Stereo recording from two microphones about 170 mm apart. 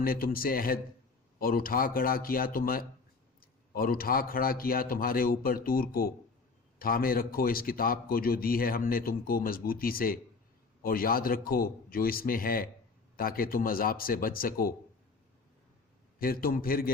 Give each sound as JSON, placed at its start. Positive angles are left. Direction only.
{"t": 0.0, "sound": "a man's voice", "side_deg": 60}
{"t": 16.1, "sound": "a man's voice", "side_deg": 60}